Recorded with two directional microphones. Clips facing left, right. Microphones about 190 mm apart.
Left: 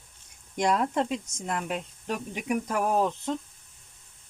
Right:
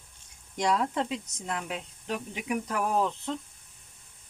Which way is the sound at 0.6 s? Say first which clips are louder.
Left 2 dB; 50° left (ahead or behind).